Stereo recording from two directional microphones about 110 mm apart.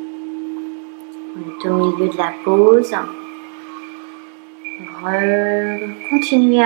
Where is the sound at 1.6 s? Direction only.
25° right (ahead or behind).